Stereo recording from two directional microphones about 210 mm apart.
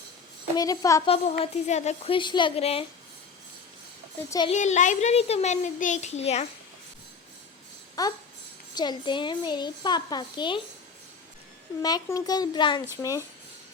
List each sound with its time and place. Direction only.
0.5 s speech: 15° left (ahead or behind)
1.0 s a child's voice: 25° left (ahead or behind)
4.2 s speech: 15° left (ahead or behind)
4.4 s a child's voice: 35° left (ahead or behind)
8.0 s a child's voice: 15° left (ahead or behind)
11.8 s a child's voice: 20° left (ahead or behind)